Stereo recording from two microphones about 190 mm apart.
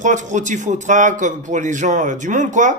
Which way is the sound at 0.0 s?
40° right (ahead or behind).